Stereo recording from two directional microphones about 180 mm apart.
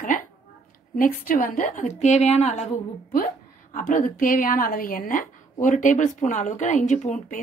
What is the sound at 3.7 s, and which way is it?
A woman's voice, 45° left (ahead or behind).